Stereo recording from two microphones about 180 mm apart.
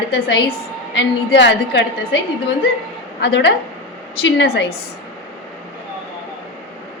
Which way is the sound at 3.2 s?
75° left (ahead or behind).